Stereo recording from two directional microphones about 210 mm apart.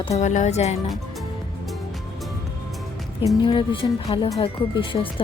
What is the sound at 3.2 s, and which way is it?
Speech, 25° left (ahead or behind).